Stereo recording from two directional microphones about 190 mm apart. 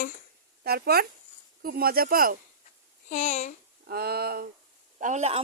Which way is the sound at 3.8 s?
55° right (ahead or behind).